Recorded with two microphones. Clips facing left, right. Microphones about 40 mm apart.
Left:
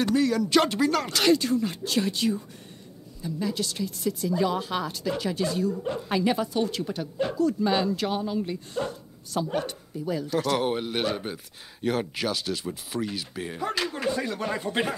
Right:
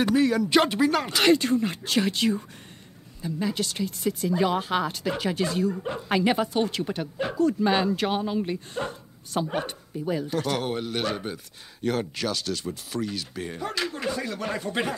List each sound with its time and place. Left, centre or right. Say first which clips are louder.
0.0 s speech: right 2 dB; centre
1.2 s speech: right 2 dB; right
3.2 s speech: right 1 dB; right
10.6 s speech: left 2 dB; centre